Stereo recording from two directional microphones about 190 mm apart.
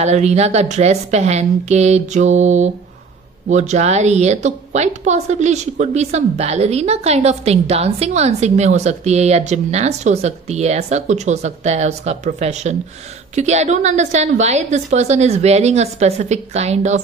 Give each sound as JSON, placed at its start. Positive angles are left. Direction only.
{"t": 0.0, "sound": "a woman's voice", "side_deg": -35}